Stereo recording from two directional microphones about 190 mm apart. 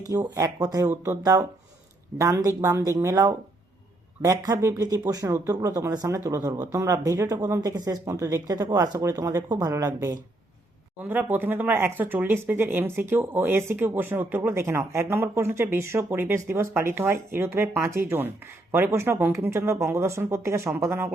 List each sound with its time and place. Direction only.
0.1 s speech: 20° right (ahead or behind)